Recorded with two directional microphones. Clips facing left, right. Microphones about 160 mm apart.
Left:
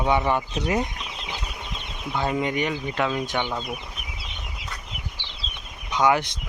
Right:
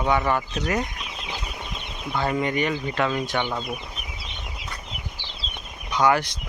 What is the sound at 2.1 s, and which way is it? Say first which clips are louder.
Speech: right 1 dB; 10° left (ahead or behind).